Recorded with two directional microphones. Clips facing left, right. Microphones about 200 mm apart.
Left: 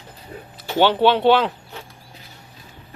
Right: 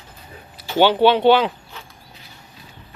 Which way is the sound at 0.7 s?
Centre (ahead or behind).